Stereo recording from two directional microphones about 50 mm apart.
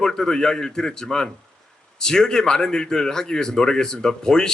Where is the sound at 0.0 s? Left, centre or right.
Centre.